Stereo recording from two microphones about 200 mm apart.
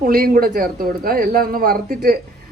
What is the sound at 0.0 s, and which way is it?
A man's voice, 50° right (ahead or behind).